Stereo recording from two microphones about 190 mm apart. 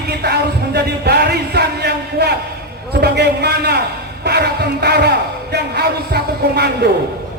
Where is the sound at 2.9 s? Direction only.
60° right (ahead or behind).